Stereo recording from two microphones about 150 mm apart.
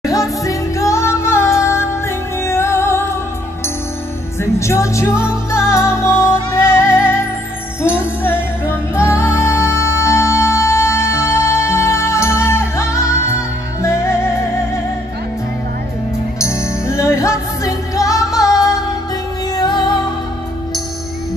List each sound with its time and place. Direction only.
0.0 s music: 20° left (ahead or behind)
4.4 s music: 20° left (ahead or behind)
16.3 s music: 20° left (ahead or behind)